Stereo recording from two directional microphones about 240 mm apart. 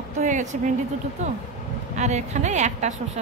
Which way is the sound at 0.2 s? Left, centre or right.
Right.